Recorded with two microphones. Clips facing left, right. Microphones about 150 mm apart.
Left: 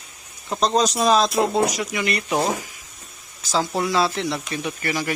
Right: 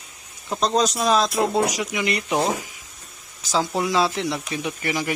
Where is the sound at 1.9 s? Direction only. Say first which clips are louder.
Even; 20° right (ahead or behind).